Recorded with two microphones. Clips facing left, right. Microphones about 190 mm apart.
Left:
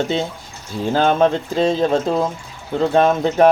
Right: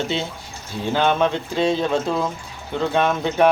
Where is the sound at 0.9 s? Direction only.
40° left (ahead or behind).